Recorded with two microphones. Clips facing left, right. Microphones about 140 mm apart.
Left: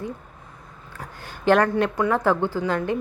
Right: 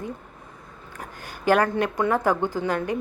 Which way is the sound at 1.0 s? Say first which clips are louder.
Left 2 dB; 10° right (ahead or behind).